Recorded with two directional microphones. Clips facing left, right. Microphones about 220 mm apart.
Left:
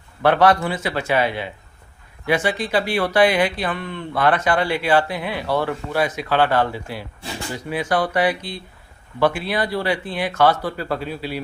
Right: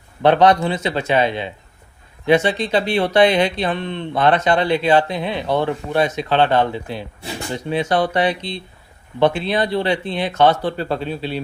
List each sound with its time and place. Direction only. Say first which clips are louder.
0.2 s speech: right 2 dB; 20° right (ahead or behind)